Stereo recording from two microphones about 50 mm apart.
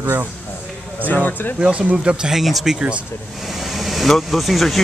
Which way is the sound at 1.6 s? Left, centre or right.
Right.